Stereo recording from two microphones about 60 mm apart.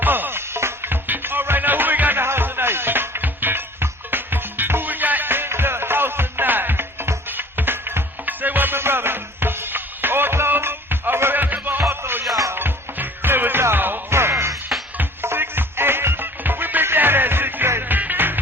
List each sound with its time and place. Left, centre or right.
0.0 s music: right
11.8 s music: right
12.3 s music: right
12.5 s music: right
14.1 s music: right